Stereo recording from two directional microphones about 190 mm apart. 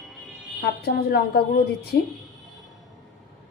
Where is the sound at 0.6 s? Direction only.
50° left (ahead or behind).